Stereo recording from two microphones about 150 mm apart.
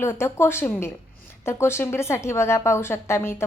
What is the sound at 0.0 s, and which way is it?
A woman's voice, 15° left (ahead or behind).